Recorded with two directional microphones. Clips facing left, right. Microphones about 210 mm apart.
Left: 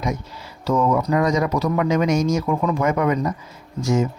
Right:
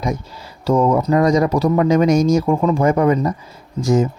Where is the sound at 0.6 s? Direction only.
35° right (ahead or behind).